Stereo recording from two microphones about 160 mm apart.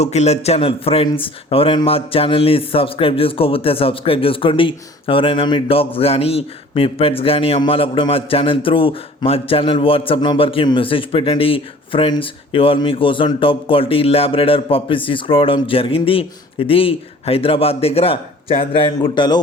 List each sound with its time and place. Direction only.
0.0 s speech: 45° left (ahead or behind); by 19.4 s 30° left (ahead or behind)